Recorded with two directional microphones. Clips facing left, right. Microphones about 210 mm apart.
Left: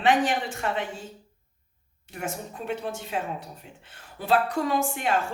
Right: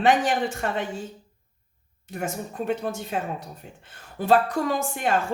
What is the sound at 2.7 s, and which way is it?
A woman's voice, 45° right (ahead or behind).